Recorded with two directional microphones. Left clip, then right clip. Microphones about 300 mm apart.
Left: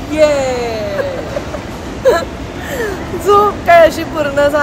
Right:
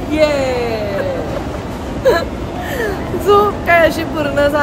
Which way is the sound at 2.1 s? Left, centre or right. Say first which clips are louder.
Left 2 dB; centre.